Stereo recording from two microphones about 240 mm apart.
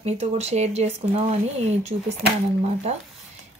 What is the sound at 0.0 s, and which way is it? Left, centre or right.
Speech, right.